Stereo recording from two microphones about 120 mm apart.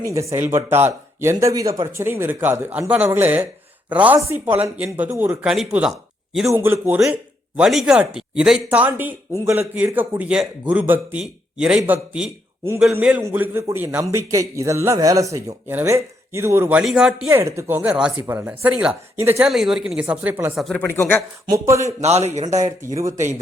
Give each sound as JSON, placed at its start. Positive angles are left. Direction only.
{"t": 0.0, "sound": "a man's voice", "side_deg": -25}
{"t": 6.5, "sound": "a man's voice", "side_deg": -20}
{"t": 16.8, "sound": "speech", "side_deg": -5}
{"t": 17.2, "sound": "speech", "side_deg": -20}
{"t": 20.8, "sound": "speech", "side_deg": 20}
{"t": 21.5, "sound": "a man's voice", "side_deg": -25}
{"t": 22.0, "sound": "speech", "side_deg": -65}
{"t": 22.6, "sound": "a man's voice", "side_deg": -25}